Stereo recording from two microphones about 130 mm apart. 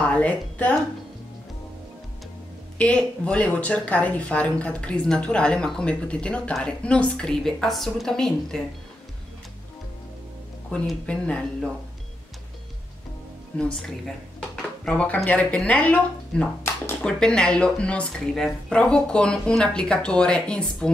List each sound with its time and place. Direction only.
0.0 s a woman's voice: 10° left (ahead or behind)
2.8 s speech: 10° left (ahead or behind)
10.7 s speech: 10° left (ahead or behind)
13.6 s speech: 5° left (ahead or behind)